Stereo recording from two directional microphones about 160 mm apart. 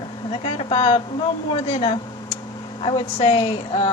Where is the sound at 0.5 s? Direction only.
35° left (ahead or behind).